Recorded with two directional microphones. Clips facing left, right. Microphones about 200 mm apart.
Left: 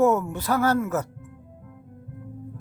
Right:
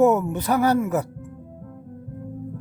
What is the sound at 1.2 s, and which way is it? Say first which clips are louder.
Music: right 7 dB; 40° right (ahead or behind).